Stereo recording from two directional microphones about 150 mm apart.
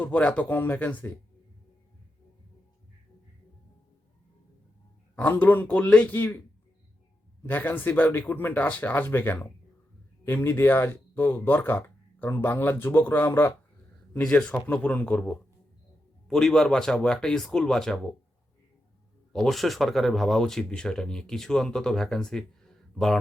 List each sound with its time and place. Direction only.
0.0 s speech: 10° left (ahead or behind)
5.1 s speech: 10° left (ahead or behind)
7.4 s speech: 15° left (ahead or behind)
14.2 s speech: 5° left (ahead or behind)
19.3 s speech: 5° left (ahead or behind)